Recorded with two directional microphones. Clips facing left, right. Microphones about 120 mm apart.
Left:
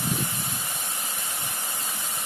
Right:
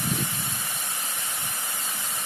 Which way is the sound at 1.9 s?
15° left (ahead or behind).